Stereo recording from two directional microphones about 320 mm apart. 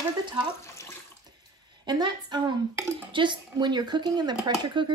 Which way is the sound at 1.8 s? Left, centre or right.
Centre.